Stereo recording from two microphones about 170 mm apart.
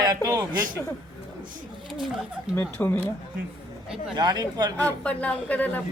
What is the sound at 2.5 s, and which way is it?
Speech, 15° left (ahead or behind).